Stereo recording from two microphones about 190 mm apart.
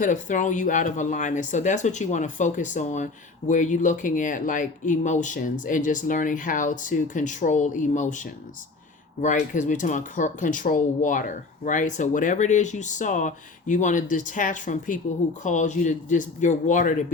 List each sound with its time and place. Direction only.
0.0 s speech: 40° left (ahead or behind)